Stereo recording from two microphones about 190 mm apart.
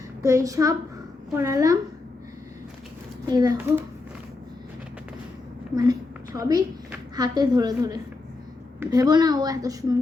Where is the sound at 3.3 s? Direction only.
20° right (ahead or behind).